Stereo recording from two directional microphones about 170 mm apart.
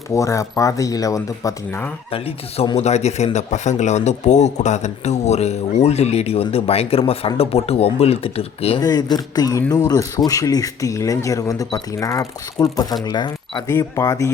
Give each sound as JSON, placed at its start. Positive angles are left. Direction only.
{"t": 0.1, "sound": "speech", "side_deg": 20}
{"t": 2.0, "sound": "speech", "side_deg": 35}
{"t": 8.8, "sound": "speech", "side_deg": 20}